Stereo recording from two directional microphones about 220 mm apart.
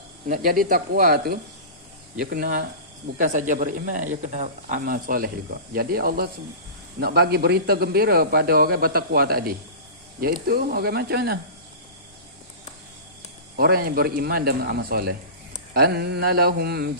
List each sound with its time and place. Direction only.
0.3 s a man's voice: 40° right (ahead or behind)
13.6 s a man's voice: 45° right (ahead or behind)